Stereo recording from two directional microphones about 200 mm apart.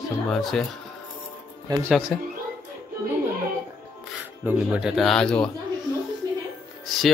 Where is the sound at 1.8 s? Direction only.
5° left (ahead or behind).